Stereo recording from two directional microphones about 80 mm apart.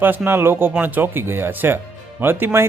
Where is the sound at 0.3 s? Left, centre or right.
Right.